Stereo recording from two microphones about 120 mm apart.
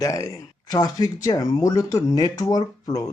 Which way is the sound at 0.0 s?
25° left (ahead or behind).